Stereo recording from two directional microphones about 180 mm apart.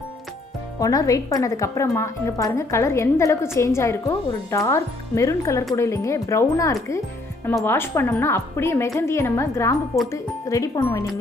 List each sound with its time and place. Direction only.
0.7 s speech: 20° left (ahead or behind)